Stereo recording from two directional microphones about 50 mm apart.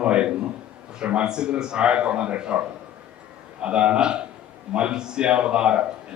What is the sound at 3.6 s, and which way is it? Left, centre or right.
Speech, right.